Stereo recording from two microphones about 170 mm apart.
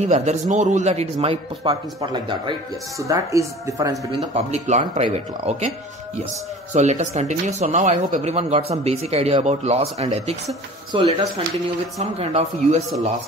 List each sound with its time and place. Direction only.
0.0 s speech: 40° right (ahead or behind); by 3.9 s 20° right (ahead or behind)
4.5 s speech: 40° right (ahead or behind)
6.7 s speech: 45° right (ahead or behind)
10.9 s speech: 30° right (ahead or behind)